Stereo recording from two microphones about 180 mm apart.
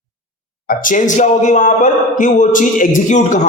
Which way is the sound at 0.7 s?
45° left (ahead or behind).